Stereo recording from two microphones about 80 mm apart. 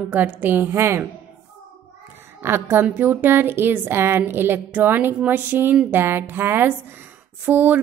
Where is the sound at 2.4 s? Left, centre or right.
Right.